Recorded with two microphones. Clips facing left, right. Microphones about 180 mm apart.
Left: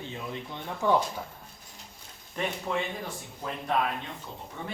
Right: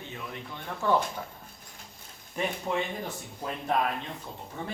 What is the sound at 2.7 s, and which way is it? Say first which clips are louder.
Speech: right 1 dB; 15° right (ahead or behind).